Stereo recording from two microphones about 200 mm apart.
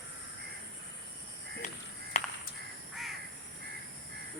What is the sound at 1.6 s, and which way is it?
Crow, 35° left (ahead or behind).